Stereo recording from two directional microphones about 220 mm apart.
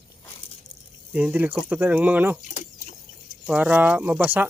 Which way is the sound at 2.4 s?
35° left (ahead or behind).